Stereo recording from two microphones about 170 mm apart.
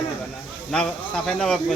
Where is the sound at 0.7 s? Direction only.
5° left (ahead or behind).